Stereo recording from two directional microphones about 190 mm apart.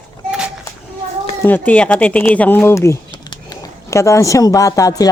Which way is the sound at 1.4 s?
10° left (ahead or behind).